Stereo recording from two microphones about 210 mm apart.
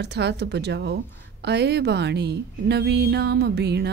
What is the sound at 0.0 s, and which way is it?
A woman's voice, 55° right (ahead or behind).